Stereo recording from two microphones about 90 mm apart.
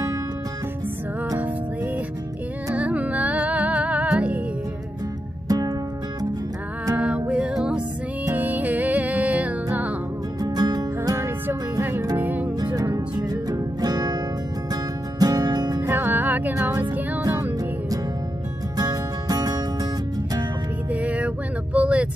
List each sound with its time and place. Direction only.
2.7 s music: 15° right (ahead or behind)
5.5 s music: 45° right (ahead or behind)
7.0 s music: 15° right (ahead or behind)
10.4 s music: 45° right (ahead or behind)
11.1 s music: 25° right (ahead or behind)
12.5 s music: 45° right (ahead or behind)
15.8 s music: 25° right (ahead or behind)
18.8 s music: 45° right (ahead or behind)
20.9 s music: 15° right (ahead or behind)
21.7 s vehicle: 15° right (ahead or behind)